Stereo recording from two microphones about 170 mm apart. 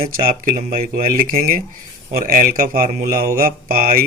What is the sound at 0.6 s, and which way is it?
Speech, 50° right (ahead or behind).